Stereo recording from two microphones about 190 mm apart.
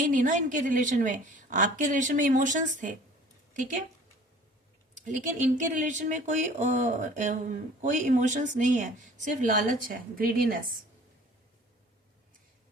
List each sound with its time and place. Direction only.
0.0 s a woman's voice: 45° right (ahead or behind)
5.0 s a woman's voice: 40° right (ahead or behind)